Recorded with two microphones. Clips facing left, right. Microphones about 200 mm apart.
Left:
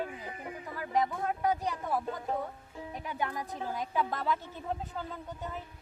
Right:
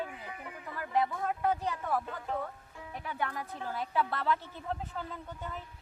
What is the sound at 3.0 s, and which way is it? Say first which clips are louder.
Speech: left 1 dB; 15° left (ahead or behind).